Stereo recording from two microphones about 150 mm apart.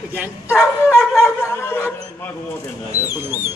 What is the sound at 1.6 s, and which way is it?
Speech, 15° left (ahead or behind).